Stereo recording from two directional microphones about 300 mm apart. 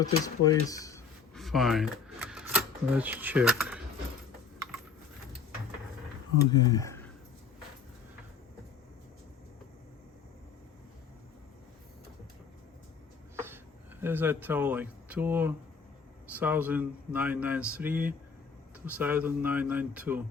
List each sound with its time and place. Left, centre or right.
0.0 s speech: centre
1.4 s a sound: centre
6.5 s speech: centre
14.0 s speech: centre